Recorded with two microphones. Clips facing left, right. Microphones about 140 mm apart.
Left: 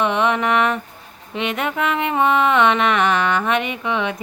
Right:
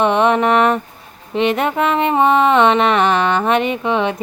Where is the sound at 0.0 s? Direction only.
40° right (ahead or behind).